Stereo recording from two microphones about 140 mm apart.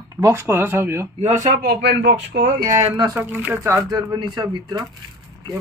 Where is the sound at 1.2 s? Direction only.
60° right (ahead or behind); by 1.8 s 75° right (ahead or behind).